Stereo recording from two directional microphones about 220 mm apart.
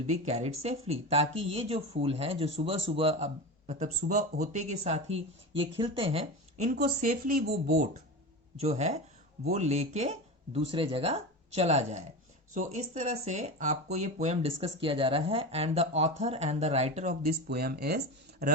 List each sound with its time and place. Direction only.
0.1 s speech: 30° right (ahead or behind)
8.5 s speech: 30° right (ahead or behind)
17.5 s speech: 45° right (ahead or behind)